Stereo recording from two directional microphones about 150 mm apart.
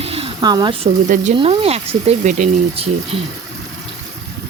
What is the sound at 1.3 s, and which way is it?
Speech, 40° right (ahead or behind).